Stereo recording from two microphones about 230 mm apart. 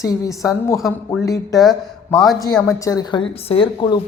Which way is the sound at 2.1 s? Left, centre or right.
Centre.